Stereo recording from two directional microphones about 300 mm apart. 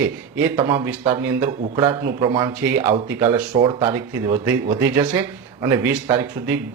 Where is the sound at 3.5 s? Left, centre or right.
Centre.